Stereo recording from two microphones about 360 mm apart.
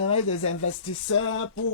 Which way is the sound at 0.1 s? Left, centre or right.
Left.